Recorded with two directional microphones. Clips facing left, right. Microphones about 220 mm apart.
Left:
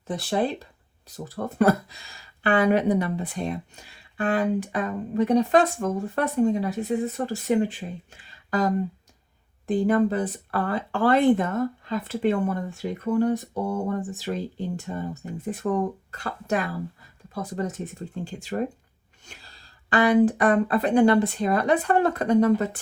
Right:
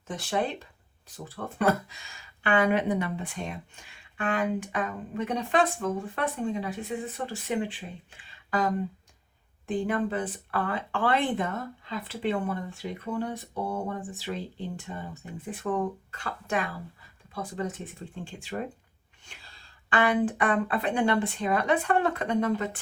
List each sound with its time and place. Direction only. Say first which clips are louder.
0.1 s speech: left 4 dB; 35° left (ahead or behind)